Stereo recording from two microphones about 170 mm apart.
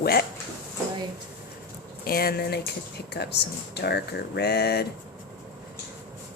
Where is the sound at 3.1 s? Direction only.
80° left.